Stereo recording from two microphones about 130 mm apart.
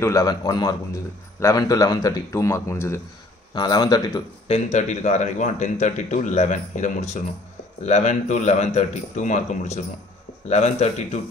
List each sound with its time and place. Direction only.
0.0 s a man's voice: 25° left (ahead or behind)
3.5 s speech: 30° left (ahead or behind)
4.5 s speech: 60° left (ahead or behind)